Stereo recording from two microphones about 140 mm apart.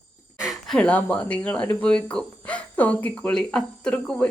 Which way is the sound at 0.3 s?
5° right (ahead or behind).